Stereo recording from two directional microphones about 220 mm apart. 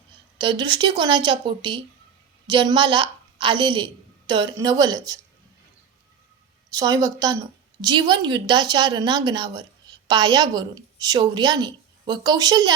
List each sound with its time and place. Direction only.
0.3 s a woman's voice: 20° right (ahead or behind)
6.7 s a woman's voice: 15° right (ahead or behind)